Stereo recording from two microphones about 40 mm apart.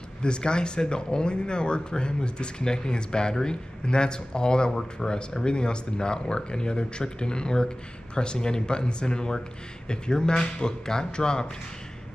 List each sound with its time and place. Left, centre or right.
0.2 s speech: left